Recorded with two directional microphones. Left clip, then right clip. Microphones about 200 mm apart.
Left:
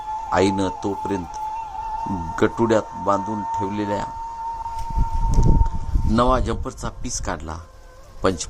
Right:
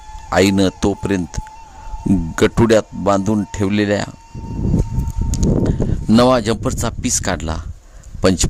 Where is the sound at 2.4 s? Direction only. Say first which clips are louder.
Right 5 dB; 50° right (ahead or behind).